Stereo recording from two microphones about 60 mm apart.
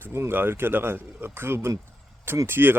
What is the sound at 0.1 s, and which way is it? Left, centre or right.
Speech, right.